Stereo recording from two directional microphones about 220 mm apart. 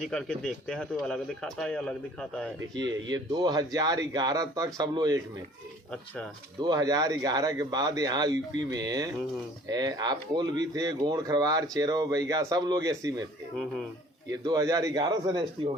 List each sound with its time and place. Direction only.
0.0 s speech: centre (ahead or behind)
2.7 s speech: 20° right (ahead or behind)
6.6 s speech: 20° right (ahead or behind)
14.3 s speech: 15° right (ahead or behind)